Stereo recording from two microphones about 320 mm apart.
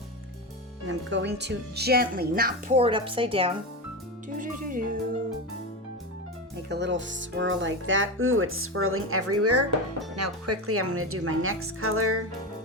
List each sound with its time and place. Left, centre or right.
0.9 s speech: right
6.7 s a woman's voice: right